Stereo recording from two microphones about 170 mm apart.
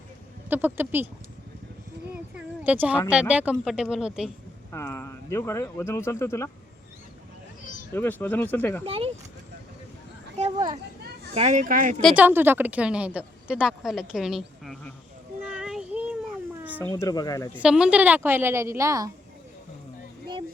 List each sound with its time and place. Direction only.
0.5 s a woman's voice: 10° right (ahead or behind)
2.3 s a sound: 10° right (ahead or behind)
3.1 s speech: 5° right (ahead or behind)
4.7 s speech: 15° left (ahead or behind)
7.9 s speech: 10° left (ahead or behind)
8.9 s speech: 35° right (ahead or behind)
11.3 s speech: 45° right (ahead or behind)
12.1 s speech: 10° right (ahead or behind)
15.4 s child singing: 5° right (ahead or behind)
16.6 s cat: 10° right (ahead or behind)
16.8 s speech: 20° left (ahead or behind)
17.6 s a woman's voice: 5° right (ahead or behind)